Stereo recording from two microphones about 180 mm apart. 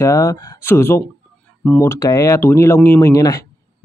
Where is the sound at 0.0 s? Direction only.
20° left (ahead or behind).